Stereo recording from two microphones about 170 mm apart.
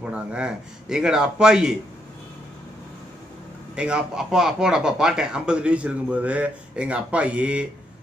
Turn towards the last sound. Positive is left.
turn(degrees=-5)  # may be behind; listen again after turning